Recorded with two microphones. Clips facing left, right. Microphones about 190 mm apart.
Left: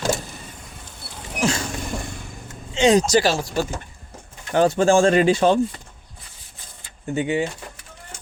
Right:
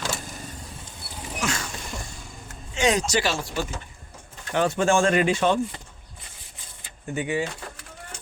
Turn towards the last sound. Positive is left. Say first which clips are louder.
# left 4 dB
turn(degrees=25)  # may be behind; listen again after turning